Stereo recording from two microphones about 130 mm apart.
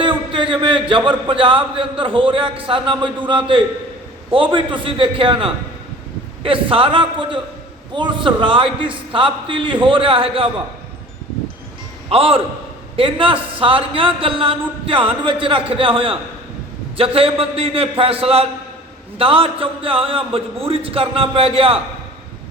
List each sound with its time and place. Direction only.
0.0 s a man's voice: 40° right (ahead or behind)
12.0 s a man's voice: 45° right (ahead or behind)